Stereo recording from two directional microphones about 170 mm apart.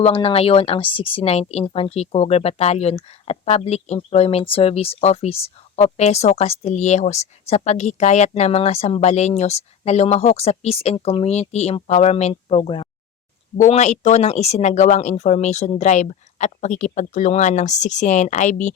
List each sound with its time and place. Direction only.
0.0 s speech: 35° left (ahead or behind)
13.6 s speech: 45° left (ahead or behind)